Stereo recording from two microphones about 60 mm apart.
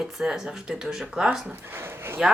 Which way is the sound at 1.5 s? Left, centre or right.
Right.